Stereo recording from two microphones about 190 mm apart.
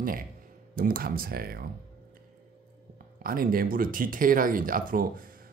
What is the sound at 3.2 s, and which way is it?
Speech, 50° right (ahead or behind).